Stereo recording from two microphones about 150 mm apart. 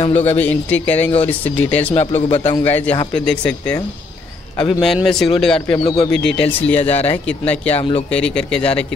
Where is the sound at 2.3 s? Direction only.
45° left (ahead or behind).